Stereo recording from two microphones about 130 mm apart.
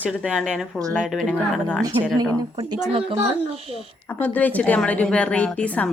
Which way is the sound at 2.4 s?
35° right (ahead or behind).